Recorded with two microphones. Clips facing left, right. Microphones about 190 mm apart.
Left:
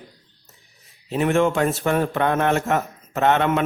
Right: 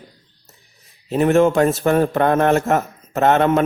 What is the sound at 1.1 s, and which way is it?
Speech, 40° right (ahead or behind).